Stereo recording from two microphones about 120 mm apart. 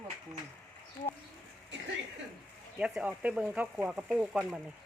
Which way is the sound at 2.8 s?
5° right (ahead or behind).